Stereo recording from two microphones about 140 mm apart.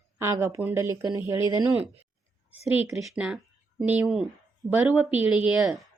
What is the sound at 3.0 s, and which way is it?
A woman's voice, 5° right (ahead or behind).